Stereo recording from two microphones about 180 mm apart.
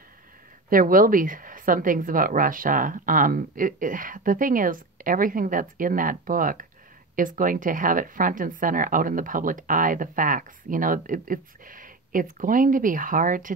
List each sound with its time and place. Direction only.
0.7 s speech: 50° right (ahead or behind)